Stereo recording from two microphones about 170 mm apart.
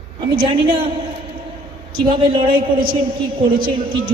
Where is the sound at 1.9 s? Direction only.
30° right (ahead or behind).